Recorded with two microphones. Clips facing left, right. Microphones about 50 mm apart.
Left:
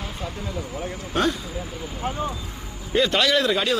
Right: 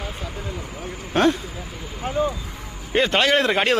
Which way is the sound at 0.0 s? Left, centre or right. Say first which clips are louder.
Even; centre.